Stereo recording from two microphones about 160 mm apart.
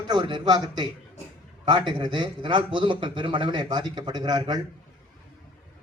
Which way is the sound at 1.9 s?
30° right (ahead or behind).